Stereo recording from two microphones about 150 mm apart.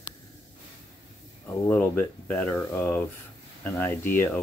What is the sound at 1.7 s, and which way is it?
Speech, 15° left (ahead or behind).